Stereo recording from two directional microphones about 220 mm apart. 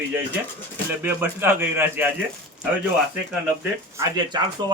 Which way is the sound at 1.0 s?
10° right (ahead or behind).